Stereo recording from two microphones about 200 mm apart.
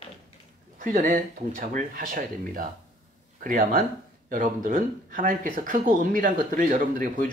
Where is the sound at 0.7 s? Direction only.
40° right (ahead or behind).